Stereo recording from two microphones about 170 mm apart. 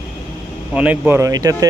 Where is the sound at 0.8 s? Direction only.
10° right (ahead or behind).